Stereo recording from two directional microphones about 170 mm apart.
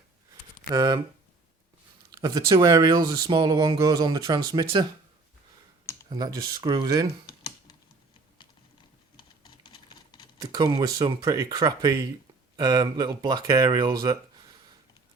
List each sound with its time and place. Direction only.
0.7 s speech: 25° right (ahead or behind)
2.2 s speech: 25° right (ahead or behind)
6.1 s speech: 25° right (ahead or behind)
9.1 s typing: 30° left (ahead or behind)
10.3 s speech: 25° right (ahead or behind)